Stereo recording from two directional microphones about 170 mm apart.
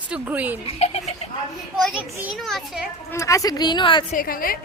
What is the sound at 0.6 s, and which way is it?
Speech, 35° left (ahead or behind).